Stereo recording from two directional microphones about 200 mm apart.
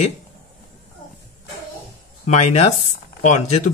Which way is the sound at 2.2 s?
35° left (ahead or behind).